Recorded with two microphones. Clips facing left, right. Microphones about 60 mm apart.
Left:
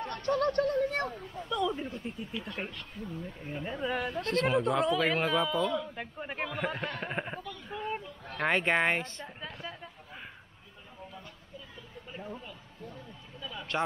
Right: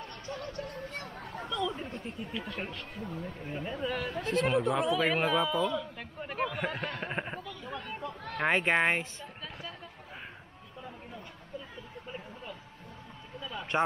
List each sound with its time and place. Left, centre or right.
0.0 s a sound: left
1.1 s speech: right
1.5 s speech: centre
3.0 s speech: right
3.6 s speech: centre
4.2 s a man's voice: centre
13.6 s a sound: right